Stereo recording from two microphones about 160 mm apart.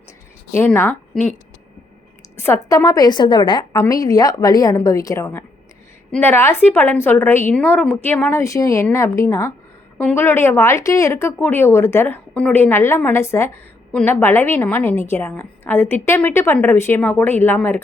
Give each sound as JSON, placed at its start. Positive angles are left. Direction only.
{"t": 0.5, "sound": "a woman's voice", "side_deg": 15}
{"t": 2.3, "sound": "a sound", "side_deg": 15}
{"t": 2.6, "sound": "a woman's voice", "side_deg": 20}